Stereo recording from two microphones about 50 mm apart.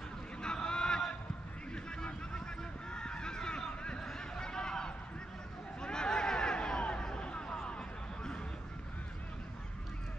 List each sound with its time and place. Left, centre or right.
0.4 s vehicle: centre
2.9 s honk: centre
4.0 s a sound: centre